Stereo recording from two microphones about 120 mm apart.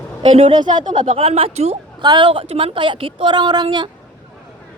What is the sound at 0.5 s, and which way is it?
Speech, 40° right (ahead or behind).